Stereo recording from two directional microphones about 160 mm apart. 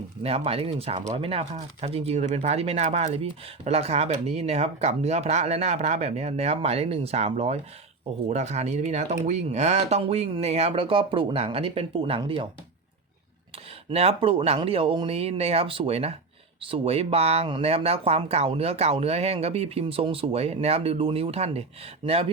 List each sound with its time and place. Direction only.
0.2 s speech: 40° right (ahead or behind)
13.9 s speech: 40° right (ahead or behind)